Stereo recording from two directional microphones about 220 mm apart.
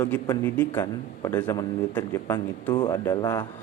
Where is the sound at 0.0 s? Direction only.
10° left (ahead or behind).